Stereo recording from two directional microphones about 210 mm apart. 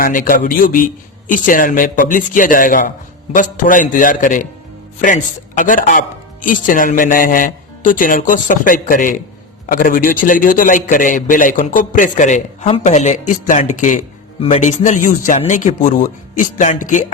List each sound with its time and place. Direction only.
0.0 s a man's voice: 40° left (ahead or behind)